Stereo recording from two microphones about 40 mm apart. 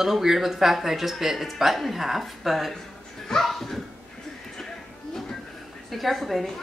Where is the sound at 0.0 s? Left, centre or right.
Centre.